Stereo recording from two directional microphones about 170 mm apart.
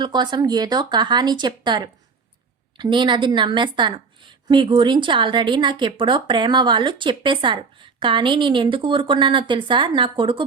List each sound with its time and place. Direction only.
0.0 s a woman's voice: 25° right (ahead or behind)